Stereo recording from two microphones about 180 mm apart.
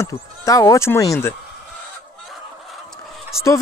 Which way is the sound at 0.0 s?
20° left (ahead or behind).